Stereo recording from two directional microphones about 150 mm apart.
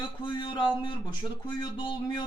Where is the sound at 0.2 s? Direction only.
35° left (ahead or behind).